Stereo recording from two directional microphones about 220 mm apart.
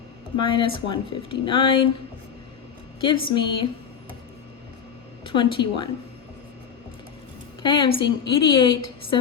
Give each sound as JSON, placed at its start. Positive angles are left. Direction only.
{"t": 0.4, "sound": "speech", "side_deg": 25}
{"t": 3.0, "sound": "speech", "side_deg": 25}
{"t": 5.2, "sound": "speech", "side_deg": 20}
{"t": 7.6, "sound": "speech", "side_deg": 20}